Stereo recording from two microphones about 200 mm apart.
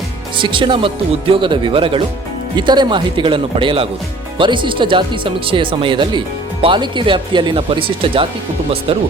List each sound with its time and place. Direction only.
0.3 s speech: 25° right (ahead or behind)